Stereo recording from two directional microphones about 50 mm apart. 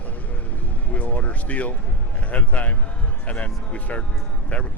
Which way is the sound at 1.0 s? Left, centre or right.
Left.